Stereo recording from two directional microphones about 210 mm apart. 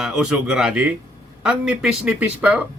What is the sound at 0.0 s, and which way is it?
A man's voice, centre (ahead or behind).